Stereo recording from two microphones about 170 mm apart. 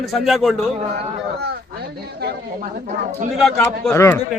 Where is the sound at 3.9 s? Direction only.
15° left (ahead or behind).